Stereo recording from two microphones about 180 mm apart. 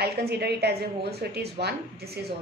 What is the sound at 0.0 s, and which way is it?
A woman's voice, 65° right (ahead or behind).